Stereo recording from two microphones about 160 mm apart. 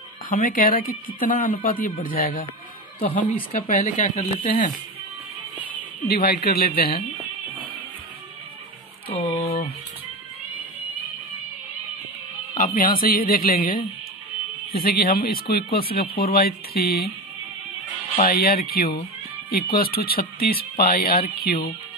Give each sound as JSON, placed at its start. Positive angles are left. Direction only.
{"t": 0.3, "sound": "speech", "side_deg": 60}
{"t": 3.5, "sound": "speech", "side_deg": 55}
{"t": 6.0, "sound": "speech", "side_deg": 75}
{"t": 9.1, "sound": "a sound", "side_deg": 30}
{"t": 12.5, "sound": "speech", "side_deg": 60}
{"t": 18.2, "sound": "speech", "side_deg": 70}